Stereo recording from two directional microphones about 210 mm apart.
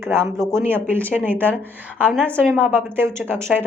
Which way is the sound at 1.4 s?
10° left (ahead or behind).